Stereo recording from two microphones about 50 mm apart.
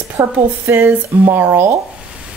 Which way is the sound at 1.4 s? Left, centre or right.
Right.